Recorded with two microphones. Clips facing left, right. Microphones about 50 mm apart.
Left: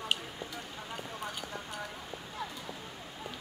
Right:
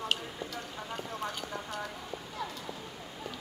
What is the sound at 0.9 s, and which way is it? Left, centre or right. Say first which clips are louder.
Speech: right 3 dB; centre.